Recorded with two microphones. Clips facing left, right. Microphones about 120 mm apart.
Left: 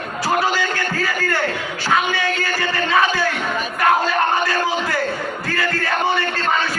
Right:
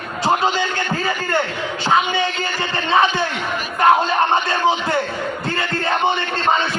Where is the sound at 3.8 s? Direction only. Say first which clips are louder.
Right 3 dB; 25° right (ahead or behind).